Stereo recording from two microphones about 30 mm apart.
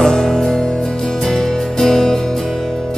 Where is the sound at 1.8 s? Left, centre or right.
Centre.